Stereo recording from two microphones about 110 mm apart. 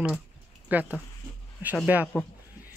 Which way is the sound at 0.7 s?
15° right (ahead or behind).